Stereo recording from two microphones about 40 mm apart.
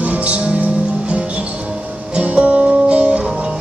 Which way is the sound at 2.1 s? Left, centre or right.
Right.